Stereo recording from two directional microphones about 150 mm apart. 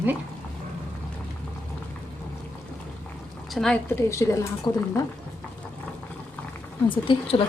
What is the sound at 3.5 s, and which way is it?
Speech, 5° left (ahead or behind).